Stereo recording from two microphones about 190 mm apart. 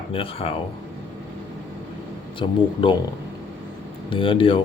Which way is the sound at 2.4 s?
30° left (ahead or behind).